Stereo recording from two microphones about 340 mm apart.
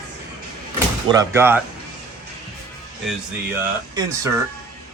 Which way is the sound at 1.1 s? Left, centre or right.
Centre.